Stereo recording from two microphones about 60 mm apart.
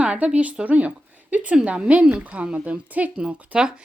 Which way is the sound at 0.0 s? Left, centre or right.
Right.